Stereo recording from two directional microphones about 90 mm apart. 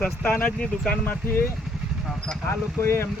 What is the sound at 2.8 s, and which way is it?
Speech, 30° left (ahead or behind).